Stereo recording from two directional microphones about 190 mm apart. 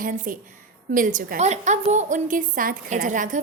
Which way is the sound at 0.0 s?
45° right (ahead or behind).